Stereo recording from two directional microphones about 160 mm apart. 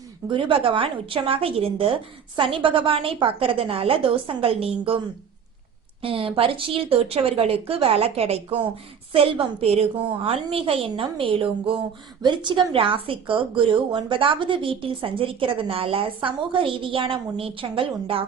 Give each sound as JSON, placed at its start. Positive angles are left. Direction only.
{"t": 0.3, "sound": "a woman's voice", "side_deg": -35}
{"t": 6.0, "sound": "a woman's voice", "side_deg": -35}